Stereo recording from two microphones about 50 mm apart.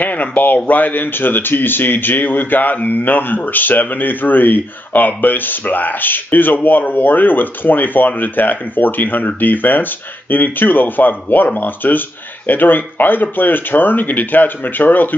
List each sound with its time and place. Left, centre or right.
0.0 s speech: left